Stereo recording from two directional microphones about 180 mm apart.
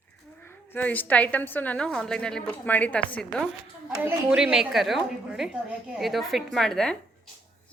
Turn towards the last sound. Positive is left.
turn(degrees=5)  # may be behind; listen again after turning